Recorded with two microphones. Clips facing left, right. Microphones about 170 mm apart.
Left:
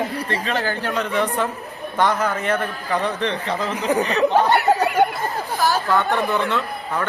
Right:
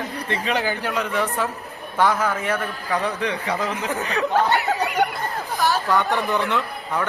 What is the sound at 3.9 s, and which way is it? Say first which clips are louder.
Speech: left 6 dB; 20° left (ahead or behind).